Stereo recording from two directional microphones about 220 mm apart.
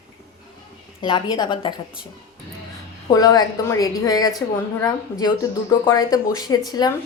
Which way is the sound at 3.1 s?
15° left (ahead or behind).